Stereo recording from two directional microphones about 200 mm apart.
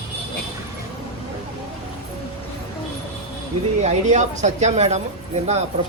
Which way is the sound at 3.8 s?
35° right (ahead or behind).